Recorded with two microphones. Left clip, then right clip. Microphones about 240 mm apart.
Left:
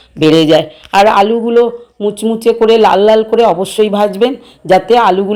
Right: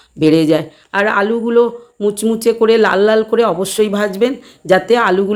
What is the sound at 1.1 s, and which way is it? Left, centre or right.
Speech, right.